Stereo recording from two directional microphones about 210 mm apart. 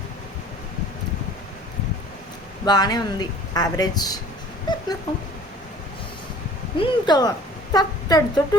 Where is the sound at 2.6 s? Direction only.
20° left (ahead or behind).